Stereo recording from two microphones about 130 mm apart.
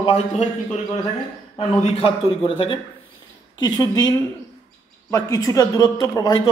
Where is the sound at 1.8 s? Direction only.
45° left (ahead or behind); by 4.1 s 30° left (ahead or behind).